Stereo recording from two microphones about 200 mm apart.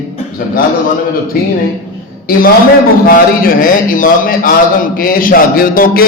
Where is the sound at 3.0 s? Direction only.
45° left (ahead or behind).